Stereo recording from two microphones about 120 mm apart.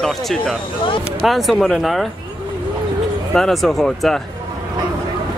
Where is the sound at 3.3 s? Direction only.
5° left (ahead or behind).